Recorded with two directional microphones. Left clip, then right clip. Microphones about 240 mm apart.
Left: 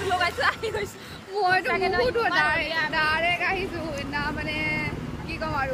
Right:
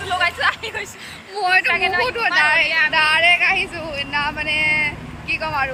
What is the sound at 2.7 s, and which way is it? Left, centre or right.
Speech, centre.